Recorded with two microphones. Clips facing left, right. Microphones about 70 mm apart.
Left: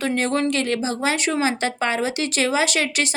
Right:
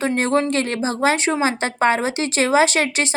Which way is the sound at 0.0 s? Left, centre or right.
Right.